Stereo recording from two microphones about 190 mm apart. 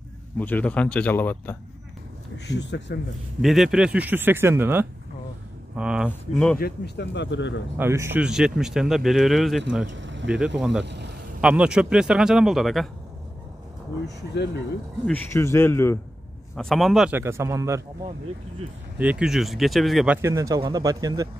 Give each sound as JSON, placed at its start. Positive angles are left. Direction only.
{"t": 0.4, "sound": "speech", "side_deg": 10}
{"t": 2.3, "sound": "speech", "side_deg": 65}
{"t": 3.3, "sound": "speech", "side_deg": 0}
{"t": 6.6, "sound": "speech", "side_deg": 60}
{"t": 7.7, "sound": "speech", "side_deg": -10}
{"t": 9.8, "sound": "a man's voice", "side_deg": -75}
{"t": 11.4, "sound": "speech", "side_deg": -5}
{"t": 14.0, "sound": "speech", "side_deg": 65}
{"t": 15.0, "sound": "speech", "side_deg": 10}
{"t": 16.5, "sound": "speech", "side_deg": 0}
{"t": 18.9, "sound": "speech", "side_deg": -5}
{"t": 20.2, "sound": "a man's voice", "side_deg": -15}